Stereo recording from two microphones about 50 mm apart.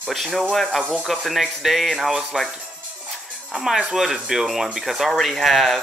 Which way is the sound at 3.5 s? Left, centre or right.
Centre.